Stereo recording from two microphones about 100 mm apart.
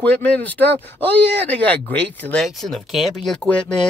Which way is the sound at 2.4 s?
Centre (ahead or behind).